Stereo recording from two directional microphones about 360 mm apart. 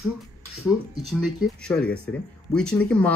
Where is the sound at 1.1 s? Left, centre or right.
Centre.